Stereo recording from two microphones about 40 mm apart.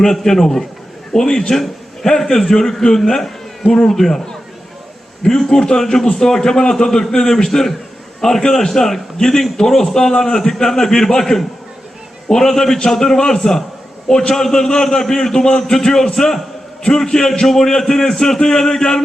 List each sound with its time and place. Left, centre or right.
0.0 s a man's voice: centre